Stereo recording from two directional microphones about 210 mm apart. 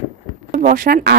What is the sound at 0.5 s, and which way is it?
Speech, 40° right (ahead or behind).